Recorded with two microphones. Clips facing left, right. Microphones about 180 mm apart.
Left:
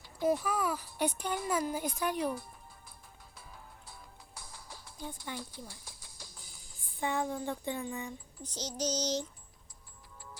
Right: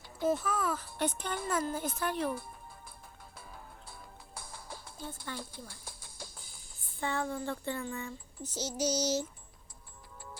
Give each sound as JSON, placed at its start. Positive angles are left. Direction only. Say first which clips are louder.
{"t": 0.2, "sound": "speech", "louder": "left 1 dB", "side_deg": 10}
{"t": 2.3, "sound": "music", "louder": "right 1 dB", "side_deg": -55}
{"t": 4.9, "sound": "speech", "louder": "left 1 dB", "side_deg": 15}
{"t": 5.6, "sound": "music", "louder": "right 1 dB", "side_deg": -55}
{"t": 7.0, "sound": "speech", "louder": "left 1 dB", "side_deg": 15}
{"t": 8.4, "sound": "child singing", "louder": "right 3 dB", "side_deg": -5}